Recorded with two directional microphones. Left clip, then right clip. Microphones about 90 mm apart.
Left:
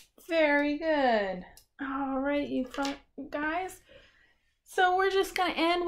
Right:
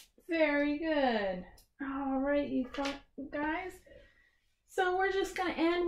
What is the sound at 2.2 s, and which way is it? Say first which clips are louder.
Speech: even; 15° left (ahead or behind).